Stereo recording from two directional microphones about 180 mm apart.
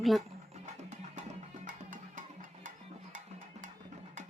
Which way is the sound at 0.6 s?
40° right (ahead or behind).